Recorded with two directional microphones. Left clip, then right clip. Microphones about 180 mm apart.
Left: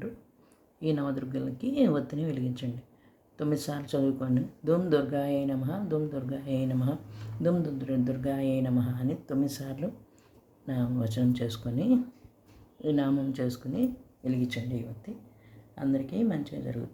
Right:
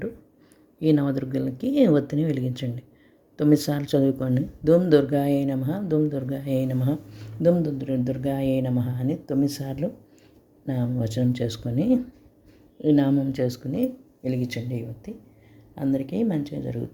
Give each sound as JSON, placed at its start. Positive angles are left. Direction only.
{"t": 0.8, "sound": "speech", "side_deg": -40}
{"t": 15.7, "sound": "speech", "side_deg": -35}